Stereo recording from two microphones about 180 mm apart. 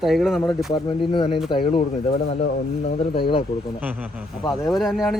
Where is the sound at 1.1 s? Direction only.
30° left (ahead or behind).